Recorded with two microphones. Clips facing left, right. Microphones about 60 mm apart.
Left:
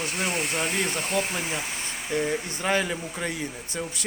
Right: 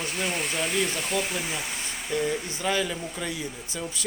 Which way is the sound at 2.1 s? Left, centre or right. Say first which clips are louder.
Left 1 dB; left.